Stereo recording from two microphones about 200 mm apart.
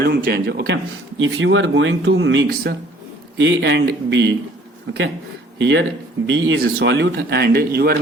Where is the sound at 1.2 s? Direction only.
75° right (ahead or behind).